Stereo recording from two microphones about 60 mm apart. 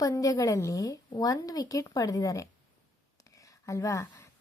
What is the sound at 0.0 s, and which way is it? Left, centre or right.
A woman's voice, left.